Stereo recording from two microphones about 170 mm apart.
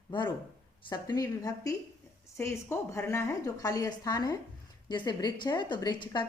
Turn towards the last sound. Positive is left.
turn(degrees=25)  # may be behind; listen again after turning